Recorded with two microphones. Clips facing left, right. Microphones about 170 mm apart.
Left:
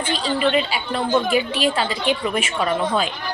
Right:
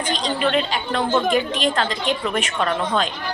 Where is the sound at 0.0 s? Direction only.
5° left (ahead or behind).